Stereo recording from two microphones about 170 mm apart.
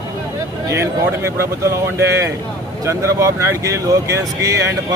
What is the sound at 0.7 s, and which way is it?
A man's voice, 15° right (ahead or behind).